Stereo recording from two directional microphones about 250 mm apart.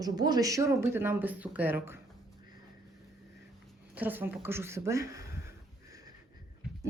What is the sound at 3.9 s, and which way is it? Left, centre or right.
Speech, centre.